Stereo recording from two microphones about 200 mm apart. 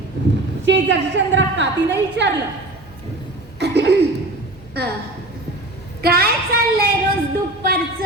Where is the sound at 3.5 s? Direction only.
55° right (ahead or behind).